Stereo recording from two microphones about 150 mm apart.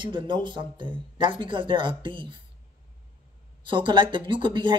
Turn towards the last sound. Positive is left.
turn(degrees=-35)  # may be behind; listen again after turning